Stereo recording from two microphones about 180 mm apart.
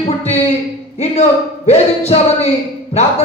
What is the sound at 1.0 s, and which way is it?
A man's voice, 35° left (ahead or behind).